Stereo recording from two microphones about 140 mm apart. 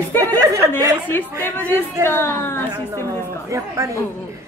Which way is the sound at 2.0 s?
15° left (ahead or behind).